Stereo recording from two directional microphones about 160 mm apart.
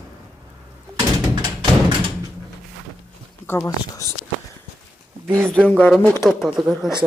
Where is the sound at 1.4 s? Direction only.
25° right (ahead or behind).